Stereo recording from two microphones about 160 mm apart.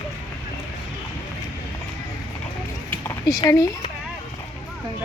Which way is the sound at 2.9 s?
15° left (ahead or behind).